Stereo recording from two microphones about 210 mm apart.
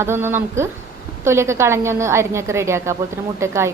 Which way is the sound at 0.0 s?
10° right (ahead or behind).